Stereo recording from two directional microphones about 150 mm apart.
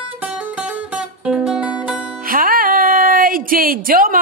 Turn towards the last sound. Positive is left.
turn(degrees=-70)  # may be behind; listen again after turning